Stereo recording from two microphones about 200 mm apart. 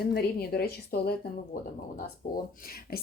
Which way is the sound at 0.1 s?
50° left (ahead or behind).